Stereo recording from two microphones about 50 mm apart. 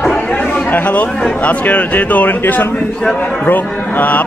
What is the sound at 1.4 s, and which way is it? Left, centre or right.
Speech, left.